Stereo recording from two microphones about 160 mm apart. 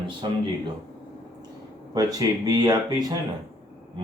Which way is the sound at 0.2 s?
30° right (ahead or behind).